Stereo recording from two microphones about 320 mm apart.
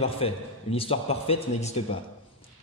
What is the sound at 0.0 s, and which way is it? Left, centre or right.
Mantra, centre.